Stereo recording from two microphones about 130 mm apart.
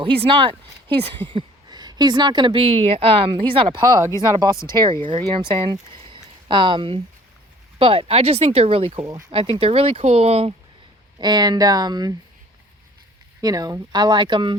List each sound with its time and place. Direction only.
0.0 s a woman's voice: 45° right (ahead or behind)
6.1 s a sound: 35° right (ahead or behind)
7.8 s speech: 45° right (ahead or behind)
11.2 s a woman's voice: 30° right (ahead or behind)
13.4 s a woman's voice: 30° right (ahead or behind)